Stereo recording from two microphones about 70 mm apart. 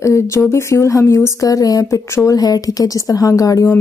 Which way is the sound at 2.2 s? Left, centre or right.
Left.